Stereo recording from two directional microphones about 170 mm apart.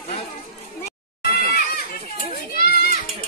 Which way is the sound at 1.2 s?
60° left (ahead or behind).